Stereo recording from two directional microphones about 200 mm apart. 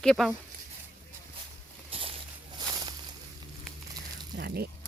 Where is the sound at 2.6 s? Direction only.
20° right (ahead or behind).